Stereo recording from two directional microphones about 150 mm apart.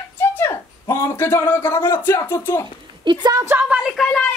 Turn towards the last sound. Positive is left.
turn(degrees=5)  # may be behind; listen again after turning